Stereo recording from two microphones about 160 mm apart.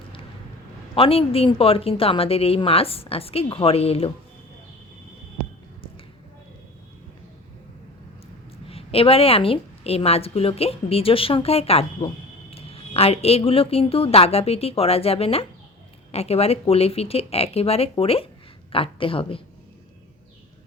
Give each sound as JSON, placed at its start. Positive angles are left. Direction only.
{"t": 0.9, "sound": "a woman's voice", "side_deg": 35}
{"t": 8.6, "sound": "a woman's voice", "side_deg": 35}